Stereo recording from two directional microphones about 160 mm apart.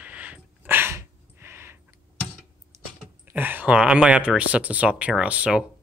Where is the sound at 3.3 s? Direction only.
10° right (ahead or behind).